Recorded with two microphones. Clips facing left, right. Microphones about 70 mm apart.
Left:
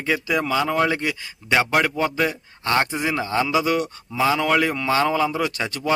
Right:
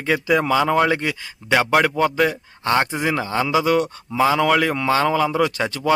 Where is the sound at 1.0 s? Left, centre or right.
Centre.